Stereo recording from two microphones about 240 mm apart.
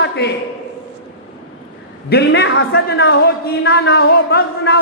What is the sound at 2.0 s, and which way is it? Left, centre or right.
A man's voice, left.